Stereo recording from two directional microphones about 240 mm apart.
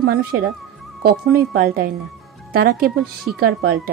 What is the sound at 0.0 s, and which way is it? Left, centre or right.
Speech, right.